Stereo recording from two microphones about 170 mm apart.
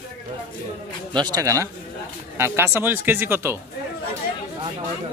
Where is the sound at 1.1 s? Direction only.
25° right (ahead or behind).